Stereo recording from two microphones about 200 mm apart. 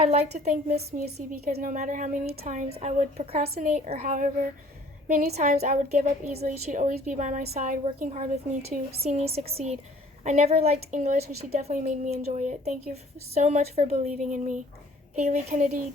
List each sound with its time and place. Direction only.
0.0 s a woman's voice: 35° right (ahead or behind)
2.4 s a woman's voice: 35° right (ahead or behind)